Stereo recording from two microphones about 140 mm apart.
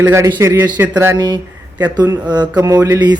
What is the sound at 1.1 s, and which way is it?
Speech, 30° right (ahead or behind).